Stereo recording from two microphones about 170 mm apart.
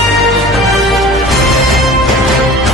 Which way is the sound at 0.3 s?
Centre (ahead or behind).